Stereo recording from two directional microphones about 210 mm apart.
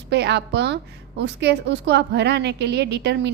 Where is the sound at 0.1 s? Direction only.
55° right (ahead or behind).